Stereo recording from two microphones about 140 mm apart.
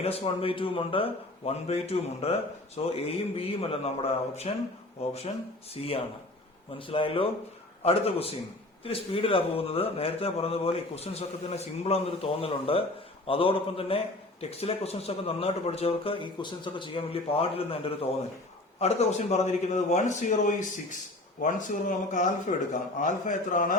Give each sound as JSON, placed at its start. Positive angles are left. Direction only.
{"t": 0.0, "sound": "a man's voice", "side_deg": 40}
{"t": 5.7, "sound": "a man's voice", "side_deg": 45}
{"t": 18.8, "sound": "a man's voice", "side_deg": 50}